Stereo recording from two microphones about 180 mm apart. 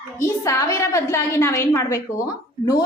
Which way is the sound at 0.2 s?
15° left (ahead or behind).